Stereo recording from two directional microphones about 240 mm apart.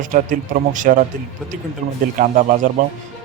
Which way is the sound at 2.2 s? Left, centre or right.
Right.